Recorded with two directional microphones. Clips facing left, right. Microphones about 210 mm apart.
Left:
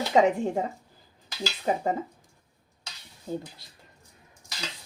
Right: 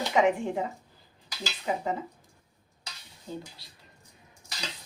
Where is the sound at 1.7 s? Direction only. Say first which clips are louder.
Left 3 dB; 40° left (ahead or behind).